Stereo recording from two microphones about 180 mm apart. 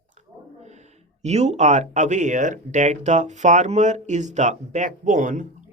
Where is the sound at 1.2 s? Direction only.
40° right (ahead or behind).